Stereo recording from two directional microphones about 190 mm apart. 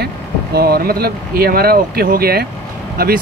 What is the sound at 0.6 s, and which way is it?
Speech, 55° right (ahead or behind).